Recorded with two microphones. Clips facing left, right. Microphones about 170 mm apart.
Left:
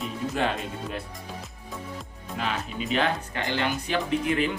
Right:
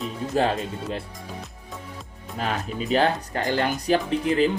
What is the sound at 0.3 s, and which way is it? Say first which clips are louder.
Speech: right 6 dB; 35° right (ahead or behind).